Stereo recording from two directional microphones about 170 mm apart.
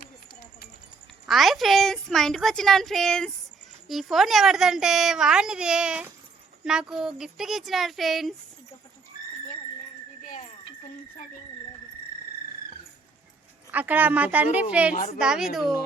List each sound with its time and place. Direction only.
0.0 s clip-clop: 70° left (ahead or behind)
1.3 s a woman's voice: centre (ahead or behind)
10.2 s a sound: 50° left (ahead or behind)
13.7 s a woman's voice: 10° right (ahead or behind)
14.9 s a woman's voice: 55° left (ahead or behind)
15.2 s a woman's voice: 5° right (ahead or behind)